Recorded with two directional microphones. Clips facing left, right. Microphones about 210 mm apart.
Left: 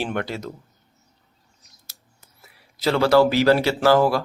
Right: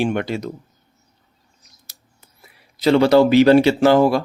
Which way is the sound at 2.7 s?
15° right (ahead or behind).